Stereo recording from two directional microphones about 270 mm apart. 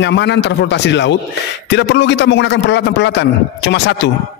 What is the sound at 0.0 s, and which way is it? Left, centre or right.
A man's voice, left.